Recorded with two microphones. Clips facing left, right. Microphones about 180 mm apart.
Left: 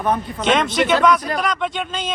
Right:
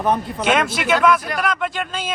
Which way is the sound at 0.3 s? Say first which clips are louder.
Left 2 dB; 5° right (ahead or behind).